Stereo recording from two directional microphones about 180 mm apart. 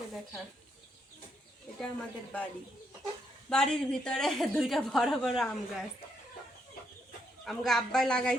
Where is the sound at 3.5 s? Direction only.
5° left (ahead or behind).